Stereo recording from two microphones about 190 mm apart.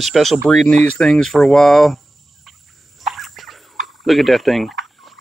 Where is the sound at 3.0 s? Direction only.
Centre (ahead or behind).